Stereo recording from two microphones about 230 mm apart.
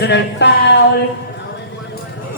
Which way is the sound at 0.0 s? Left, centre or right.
Left.